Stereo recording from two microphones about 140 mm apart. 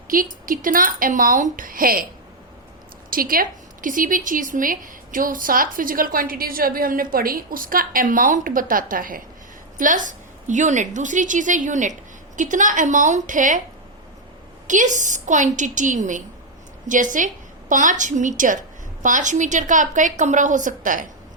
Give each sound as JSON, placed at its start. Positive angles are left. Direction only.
{"t": 0.1, "sound": "a woman's voice", "side_deg": -80}
{"t": 1.5, "sound": "a woman's voice", "side_deg": -85}
{"t": 3.1, "sound": "a woman's voice", "side_deg": -90}
{"t": 9.7, "sound": "a woman's voice", "side_deg": -70}
{"t": 14.7, "sound": "a woman's voice", "side_deg": -60}